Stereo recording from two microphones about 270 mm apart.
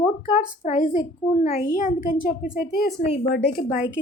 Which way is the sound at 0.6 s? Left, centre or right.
Left.